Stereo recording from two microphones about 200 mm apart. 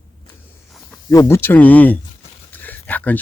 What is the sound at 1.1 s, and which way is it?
A man's voice, 15° left (ahead or behind).